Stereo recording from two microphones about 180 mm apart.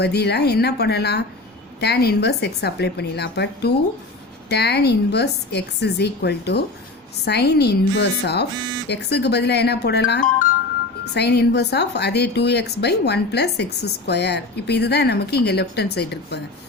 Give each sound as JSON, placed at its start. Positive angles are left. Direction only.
{"t": 0.0, "sound": "a woman's voice", "side_deg": 65}